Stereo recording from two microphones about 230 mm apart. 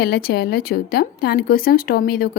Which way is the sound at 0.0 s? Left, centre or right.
Left.